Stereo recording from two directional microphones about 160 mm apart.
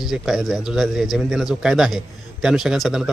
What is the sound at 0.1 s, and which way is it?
A man's voice, centre (ahead or behind).